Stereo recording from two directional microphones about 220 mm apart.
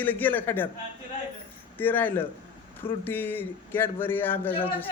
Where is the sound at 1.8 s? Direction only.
10° left (ahead or behind).